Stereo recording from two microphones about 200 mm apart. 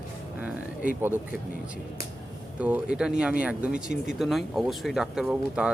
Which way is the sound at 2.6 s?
5° right (ahead or behind).